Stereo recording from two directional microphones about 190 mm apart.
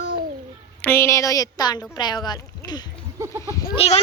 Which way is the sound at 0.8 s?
10° left (ahead or behind).